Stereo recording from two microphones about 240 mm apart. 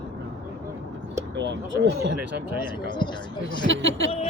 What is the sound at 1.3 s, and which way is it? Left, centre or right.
Speech, right.